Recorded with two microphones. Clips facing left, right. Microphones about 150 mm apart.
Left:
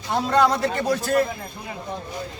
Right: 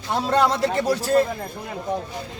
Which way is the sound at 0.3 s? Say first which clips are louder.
Even; 30° right (ahead or behind).